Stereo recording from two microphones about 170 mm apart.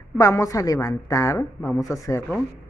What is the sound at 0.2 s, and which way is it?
A woman's voice, 20° left (ahead or behind).